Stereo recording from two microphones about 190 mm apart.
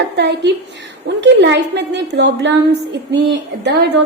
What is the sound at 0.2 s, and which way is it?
A woman's voice, 60° right (ahead or behind).